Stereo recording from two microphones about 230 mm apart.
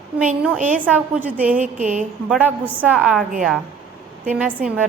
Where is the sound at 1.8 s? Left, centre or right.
Right.